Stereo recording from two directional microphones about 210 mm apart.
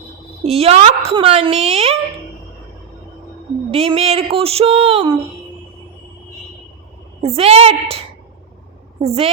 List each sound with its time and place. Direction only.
0.4 s a woman's voice: 30° right (ahead or behind)
3.7 s a woman's voice: 30° right (ahead or behind)
7.2 s a woman's voice: 30° right (ahead or behind)